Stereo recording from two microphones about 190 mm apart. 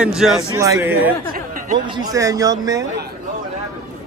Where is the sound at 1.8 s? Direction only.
20° right (ahead or behind).